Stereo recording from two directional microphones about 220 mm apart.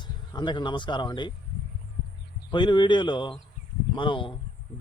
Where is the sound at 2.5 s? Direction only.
20° left (ahead or behind).